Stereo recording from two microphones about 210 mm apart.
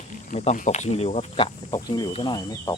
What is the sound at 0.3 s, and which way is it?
Speech, 35° left (ahead or behind).